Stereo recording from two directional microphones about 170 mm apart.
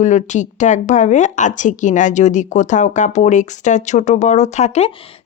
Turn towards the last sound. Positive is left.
turn(degrees=40)  # may be behind; listen again after turning